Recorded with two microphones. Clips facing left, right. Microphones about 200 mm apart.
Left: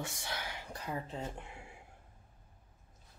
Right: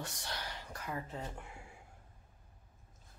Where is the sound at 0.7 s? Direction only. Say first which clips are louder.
Left 2 dB; 25° left (ahead or behind).